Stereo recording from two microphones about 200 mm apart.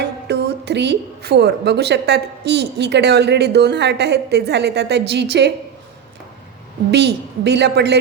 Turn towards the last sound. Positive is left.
turn(degrees=-55)  # may be behind; listen again after turning